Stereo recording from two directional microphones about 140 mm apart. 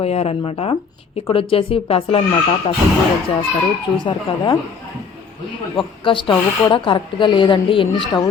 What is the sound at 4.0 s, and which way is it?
Speech, 35° left (ahead or behind).